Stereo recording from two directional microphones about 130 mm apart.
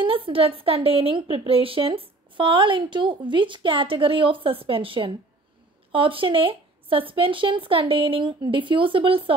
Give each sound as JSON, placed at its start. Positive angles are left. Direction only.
{"t": 0.0, "sound": "a woman's voice", "side_deg": -45}